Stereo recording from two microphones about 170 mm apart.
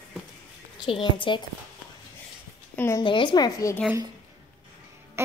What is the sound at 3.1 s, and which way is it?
Speech, 30° left (ahead or behind).